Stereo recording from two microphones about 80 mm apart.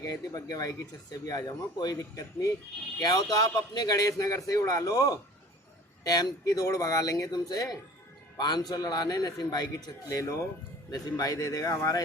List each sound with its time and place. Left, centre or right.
0.0 s a man's voice: left
2.0 s speech: left
3.0 s a man's voice: left